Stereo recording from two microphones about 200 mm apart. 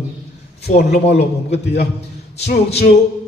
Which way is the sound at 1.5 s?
55° left (ahead or behind).